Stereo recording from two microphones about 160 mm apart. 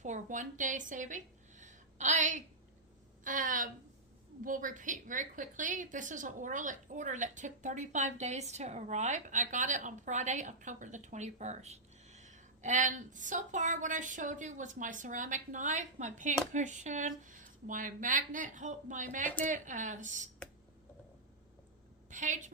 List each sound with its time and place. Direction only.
0.0 s a woman's voice: 50° right (ahead or behind)
22.1 s a woman's voice: 50° right (ahead or behind)